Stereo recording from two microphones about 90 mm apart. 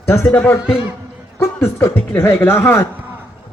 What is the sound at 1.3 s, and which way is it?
A man's voice, 30° left (ahead or behind).